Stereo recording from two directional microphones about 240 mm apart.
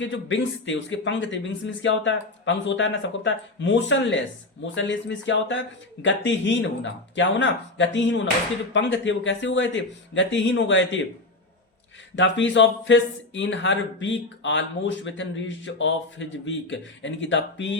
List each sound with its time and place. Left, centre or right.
0.0 s speech: left
12.1 s speech: left